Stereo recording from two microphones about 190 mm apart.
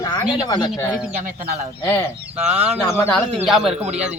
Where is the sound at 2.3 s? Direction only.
5° right (ahead or behind).